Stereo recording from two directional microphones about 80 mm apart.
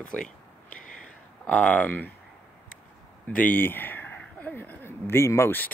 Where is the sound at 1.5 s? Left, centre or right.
Centre.